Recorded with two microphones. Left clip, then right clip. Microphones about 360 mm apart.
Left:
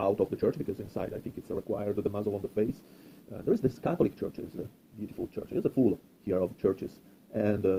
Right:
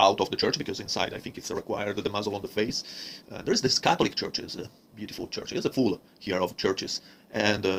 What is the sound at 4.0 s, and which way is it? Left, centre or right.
Speech, centre.